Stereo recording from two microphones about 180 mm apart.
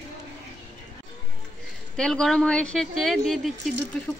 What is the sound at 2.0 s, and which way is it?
Speech, 5° left (ahead or behind).